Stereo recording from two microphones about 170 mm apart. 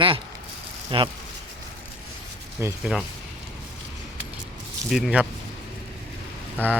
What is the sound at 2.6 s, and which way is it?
Speech, 15° right (ahead or behind).